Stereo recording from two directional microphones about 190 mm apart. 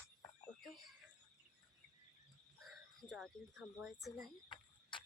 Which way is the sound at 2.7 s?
Centre (ahead or behind).